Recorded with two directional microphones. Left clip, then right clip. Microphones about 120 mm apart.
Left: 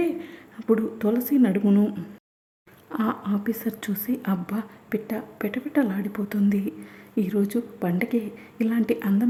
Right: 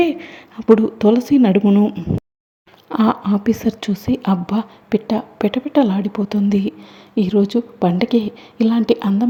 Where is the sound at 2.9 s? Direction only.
45° right (ahead or behind).